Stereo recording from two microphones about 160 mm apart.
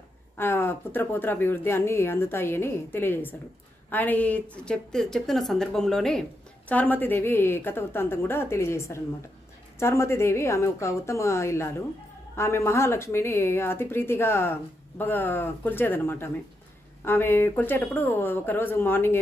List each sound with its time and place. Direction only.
0.4 s a woman's voice: 15° left (ahead or behind)